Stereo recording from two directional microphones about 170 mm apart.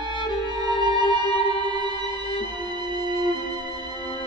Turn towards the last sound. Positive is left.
turn(degrees=-25)  # may be behind; listen again after turning